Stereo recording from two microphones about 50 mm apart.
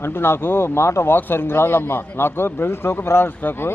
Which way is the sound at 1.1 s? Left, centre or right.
Left.